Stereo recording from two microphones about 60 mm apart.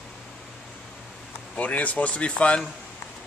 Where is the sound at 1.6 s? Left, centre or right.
Left.